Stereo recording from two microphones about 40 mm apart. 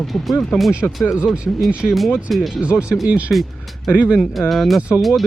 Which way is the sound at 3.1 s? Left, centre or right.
Right.